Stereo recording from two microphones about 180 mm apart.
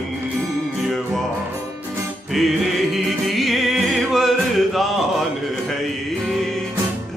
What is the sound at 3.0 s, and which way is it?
Music, centre (ahead or behind).